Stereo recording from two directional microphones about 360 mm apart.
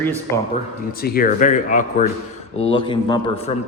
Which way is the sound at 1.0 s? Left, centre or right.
Left.